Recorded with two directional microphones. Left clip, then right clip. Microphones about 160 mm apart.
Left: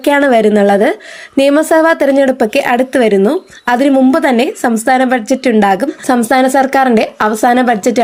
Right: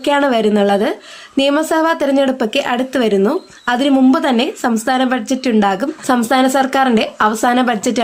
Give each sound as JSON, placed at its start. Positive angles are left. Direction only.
{"t": 0.0, "sound": "a woman's voice", "side_deg": 35}